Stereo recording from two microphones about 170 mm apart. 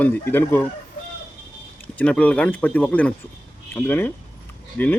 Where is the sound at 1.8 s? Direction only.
10° left (ahead or behind).